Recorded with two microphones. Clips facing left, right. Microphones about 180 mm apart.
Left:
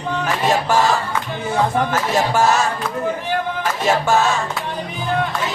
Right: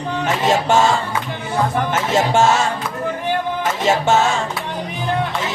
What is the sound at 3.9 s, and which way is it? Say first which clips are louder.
Music: right 1 dB; 25° right (ahead or behind).